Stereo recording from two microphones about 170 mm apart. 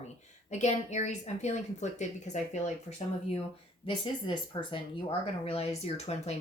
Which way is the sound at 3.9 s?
25° left (ahead or behind).